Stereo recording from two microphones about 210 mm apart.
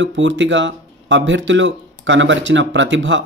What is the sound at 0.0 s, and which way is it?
Speech, 60° right (ahead or behind).